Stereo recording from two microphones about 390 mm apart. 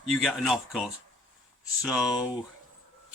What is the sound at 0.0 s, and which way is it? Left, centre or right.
A man's voice, centre.